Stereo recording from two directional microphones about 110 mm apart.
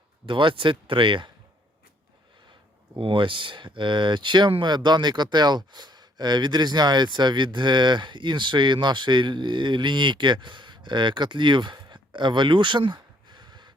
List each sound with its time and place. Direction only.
0.3 s speech: 50° right (ahead or behind)
3.0 s speech: 50° right (ahead or behind)